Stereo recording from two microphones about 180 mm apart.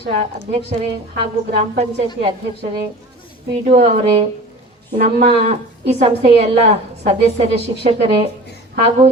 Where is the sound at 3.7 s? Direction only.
35° right (ahead or behind).